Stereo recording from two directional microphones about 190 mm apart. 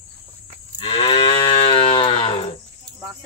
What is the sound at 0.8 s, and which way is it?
Moo, 30° left (ahead or behind).